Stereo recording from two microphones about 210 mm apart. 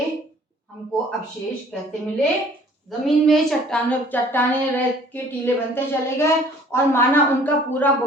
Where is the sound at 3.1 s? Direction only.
Centre (ahead or behind).